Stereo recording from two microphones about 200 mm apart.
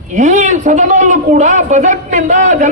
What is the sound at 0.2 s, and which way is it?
A man's voice, 35° right (ahead or behind).